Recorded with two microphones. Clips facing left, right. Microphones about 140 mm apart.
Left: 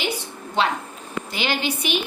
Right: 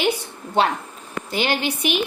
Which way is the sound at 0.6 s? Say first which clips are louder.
Right 3 dB; 50° right (ahead or behind).